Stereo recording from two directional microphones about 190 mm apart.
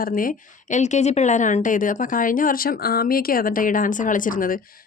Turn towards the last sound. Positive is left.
turn(degrees=45)  # may be behind; listen again after turning